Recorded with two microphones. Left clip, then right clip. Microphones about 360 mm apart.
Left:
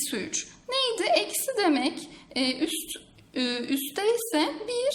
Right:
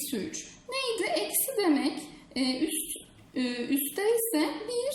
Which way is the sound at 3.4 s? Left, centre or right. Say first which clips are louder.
Left 2 dB; left.